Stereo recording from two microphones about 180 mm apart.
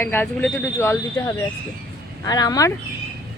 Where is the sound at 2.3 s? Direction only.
20° left (ahead or behind).